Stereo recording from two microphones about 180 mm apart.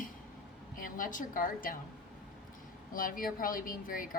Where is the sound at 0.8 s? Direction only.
45° left (ahead or behind).